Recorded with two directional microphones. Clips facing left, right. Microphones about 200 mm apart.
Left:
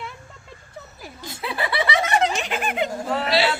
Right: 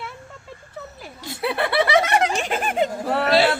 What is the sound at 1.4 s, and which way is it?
Snicker, 60° right (ahead or behind).